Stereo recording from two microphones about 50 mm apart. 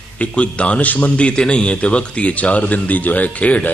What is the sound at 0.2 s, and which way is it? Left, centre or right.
A man's voice, left.